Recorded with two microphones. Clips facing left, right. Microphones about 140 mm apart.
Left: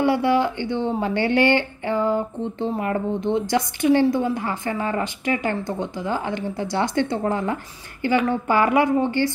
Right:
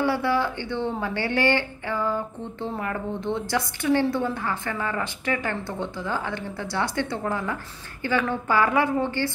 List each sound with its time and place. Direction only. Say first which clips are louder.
0.0 s a woman's voice: left 4 dB; 15° left (ahead or behind)